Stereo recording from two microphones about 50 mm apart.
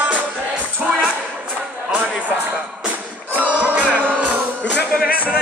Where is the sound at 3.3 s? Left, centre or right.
Right.